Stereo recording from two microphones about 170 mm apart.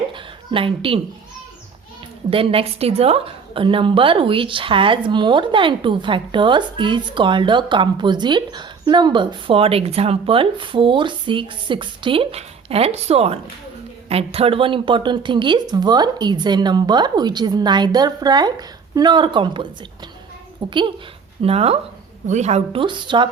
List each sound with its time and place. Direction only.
0.1 s a woman's voice: 30° right (ahead or behind)
2.3 s a woman's voice: 35° right (ahead or behind)
20.7 s a woman's voice: 30° right (ahead or behind)